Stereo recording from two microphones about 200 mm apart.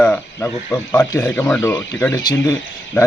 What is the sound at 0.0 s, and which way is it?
Speech, 10° left (ahead or behind).